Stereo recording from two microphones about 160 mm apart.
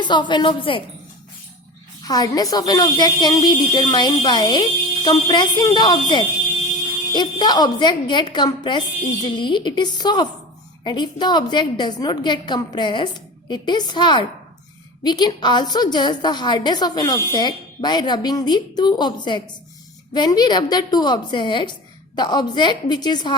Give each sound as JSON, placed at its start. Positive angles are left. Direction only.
{"t": 0.0, "sound": "a woman's voice", "side_deg": 30}
{"t": 2.0, "sound": "a woman's voice", "side_deg": 25}